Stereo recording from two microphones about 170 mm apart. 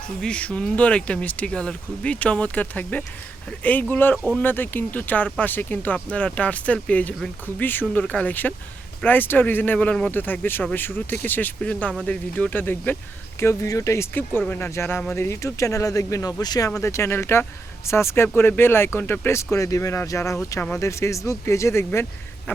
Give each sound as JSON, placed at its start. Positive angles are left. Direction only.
{"t": 0.2, "sound": "speech", "side_deg": 5}